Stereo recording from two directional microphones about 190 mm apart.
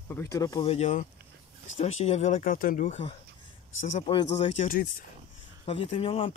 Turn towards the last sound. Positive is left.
turn(degrees=30)  # may be behind; listen again after turning